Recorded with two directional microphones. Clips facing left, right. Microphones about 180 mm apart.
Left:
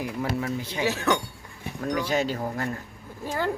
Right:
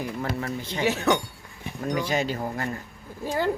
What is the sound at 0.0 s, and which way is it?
Speech, 5° left (ahead or behind).